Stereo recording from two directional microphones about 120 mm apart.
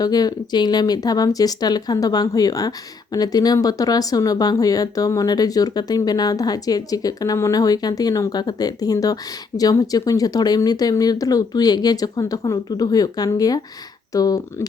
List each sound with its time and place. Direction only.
0.0 s speech: 30° left (ahead or behind)